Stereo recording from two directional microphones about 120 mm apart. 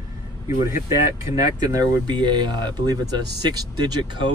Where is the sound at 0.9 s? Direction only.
30° right (ahead or behind).